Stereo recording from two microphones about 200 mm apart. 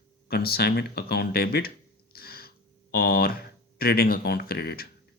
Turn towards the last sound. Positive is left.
turn(degrees=50)  # may be behind; listen again after turning